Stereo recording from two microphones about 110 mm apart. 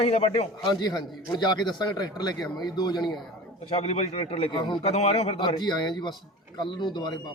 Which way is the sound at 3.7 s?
75° left (ahead or behind).